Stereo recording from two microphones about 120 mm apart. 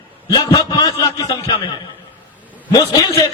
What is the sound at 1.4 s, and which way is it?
Speech, 50° left (ahead or behind).